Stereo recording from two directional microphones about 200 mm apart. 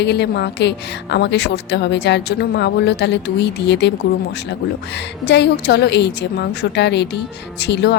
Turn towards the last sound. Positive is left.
turn(degrees=55)  # may be behind; listen again after turning